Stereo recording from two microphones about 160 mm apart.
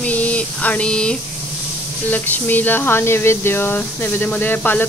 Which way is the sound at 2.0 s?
10° left (ahead or behind).